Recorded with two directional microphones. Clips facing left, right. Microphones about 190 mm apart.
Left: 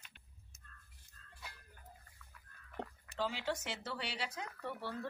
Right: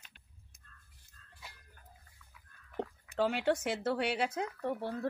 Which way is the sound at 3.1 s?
60° right (ahead or behind).